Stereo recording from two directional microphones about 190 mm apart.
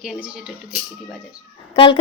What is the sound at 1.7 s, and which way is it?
Speech, 30° left (ahead or behind).